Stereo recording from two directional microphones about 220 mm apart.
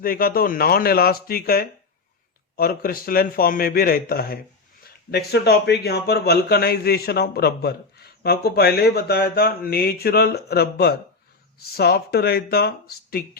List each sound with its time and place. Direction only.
0.0 s a man's voice: 40° left (ahead or behind)